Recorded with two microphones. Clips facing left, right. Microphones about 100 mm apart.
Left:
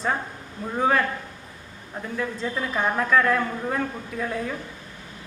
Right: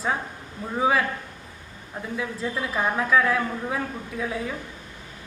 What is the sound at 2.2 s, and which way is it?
A woman's voice, 5° right (ahead or behind).